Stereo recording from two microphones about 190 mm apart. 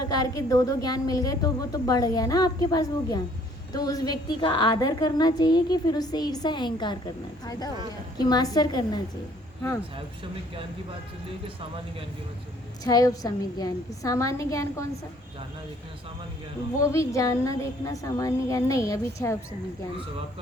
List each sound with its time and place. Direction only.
0.0 s a woman's voice: 20° left (ahead or behind)
12.8 s a woman's voice: 20° left (ahead or behind)
16.8 s a woman's voice: 15° left (ahead or behind)